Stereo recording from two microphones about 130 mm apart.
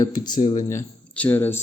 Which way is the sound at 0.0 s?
35° left (ahead or behind).